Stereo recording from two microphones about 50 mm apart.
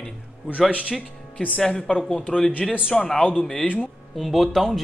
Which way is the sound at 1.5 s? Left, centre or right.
Centre.